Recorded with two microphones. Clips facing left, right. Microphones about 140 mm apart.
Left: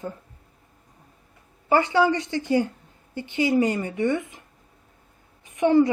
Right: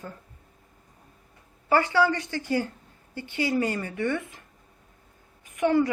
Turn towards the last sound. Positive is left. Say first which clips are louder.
# left 4 dB
turn(degrees=20)  # may be behind; listen again after turning